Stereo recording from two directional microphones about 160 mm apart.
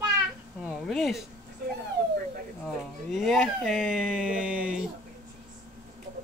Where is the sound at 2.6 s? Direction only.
Centre (ahead or behind).